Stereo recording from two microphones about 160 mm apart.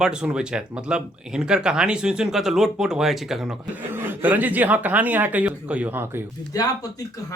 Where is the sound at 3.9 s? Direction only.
15° right (ahead or behind).